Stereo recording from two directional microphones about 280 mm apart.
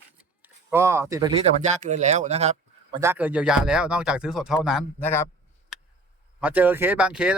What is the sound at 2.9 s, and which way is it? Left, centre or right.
Speech, centre.